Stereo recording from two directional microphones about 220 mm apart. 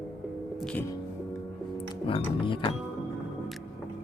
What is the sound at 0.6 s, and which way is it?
Music, 5° left (ahead or behind).